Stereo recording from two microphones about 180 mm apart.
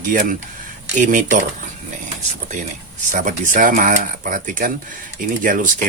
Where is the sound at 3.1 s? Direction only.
45° right (ahead or behind).